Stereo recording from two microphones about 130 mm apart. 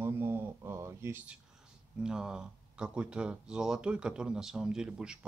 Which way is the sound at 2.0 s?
5° right (ahead or behind).